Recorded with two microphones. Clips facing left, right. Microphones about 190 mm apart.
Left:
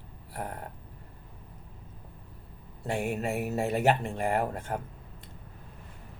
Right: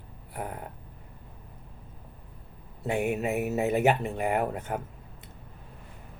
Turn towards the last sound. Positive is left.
turn(degrees=-5)  # may be behind; listen again after turning